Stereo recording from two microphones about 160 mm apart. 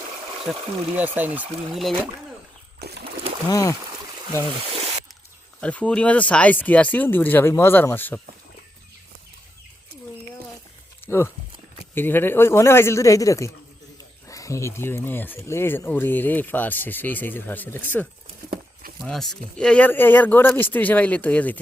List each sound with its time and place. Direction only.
0.5 s speech: 5° right (ahead or behind)
1.8 s speech: centre (ahead or behind)
3.5 s speech: 20° left (ahead or behind)
4.7 s a sound: 40° right (ahead or behind)
5.5 s speech: 10° left (ahead or behind)
11.0 s a sound: 15° left (ahead or behind)
11.9 s speech: 15° left (ahead or behind)
18.5 s a sound: 60° right (ahead or behind)
19.0 s speech: centre (ahead or behind)